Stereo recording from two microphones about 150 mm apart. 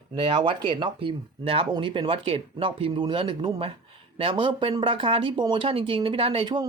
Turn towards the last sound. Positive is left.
turn(degrees=-35)  # may be behind; listen again after turning